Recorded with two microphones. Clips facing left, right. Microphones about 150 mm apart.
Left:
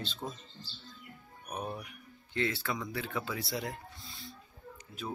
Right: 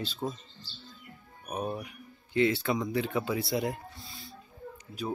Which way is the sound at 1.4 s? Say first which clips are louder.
Right 5 dB; 20° right (ahead or behind).